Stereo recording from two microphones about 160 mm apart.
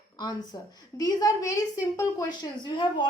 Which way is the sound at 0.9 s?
20° left (ahead or behind).